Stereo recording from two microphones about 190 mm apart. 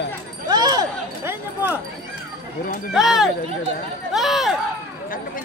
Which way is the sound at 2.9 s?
Centre (ahead or behind).